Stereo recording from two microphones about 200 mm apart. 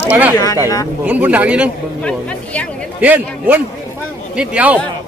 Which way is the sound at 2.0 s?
5° left (ahead or behind).